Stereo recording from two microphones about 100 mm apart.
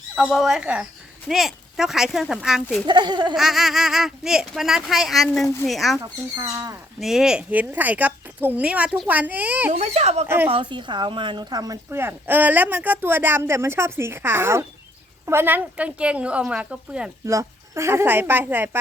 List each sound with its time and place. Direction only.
0.2 s speech: 5° right (ahead or behind)
2.8 s speech: 45° right (ahead or behind)
3.3 s speech: 5° right (ahead or behind)
6.0 s speech: 30° right (ahead or behind)
7.0 s a woman's voice: 5° right (ahead or behind)
9.7 s speech: 90° right
10.2 s speech: 20° right (ahead or behind)
10.5 s speech: 50° right (ahead or behind)
11.9 s a woman's voice: 25° right (ahead or behind)
17.2 s speech: 30° right (ahead or behind)